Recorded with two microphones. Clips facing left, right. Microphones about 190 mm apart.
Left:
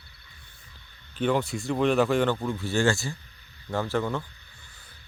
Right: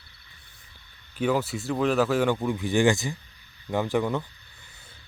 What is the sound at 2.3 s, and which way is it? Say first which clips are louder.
Speech: right 3 dB; 15° right (ahead or behind).